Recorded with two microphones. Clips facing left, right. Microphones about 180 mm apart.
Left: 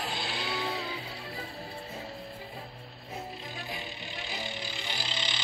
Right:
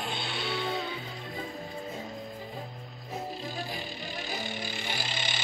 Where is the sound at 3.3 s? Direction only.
35° right (ahead or behind).